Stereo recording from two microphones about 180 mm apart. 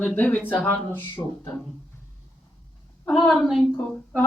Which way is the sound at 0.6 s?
10° left (ahead or behind).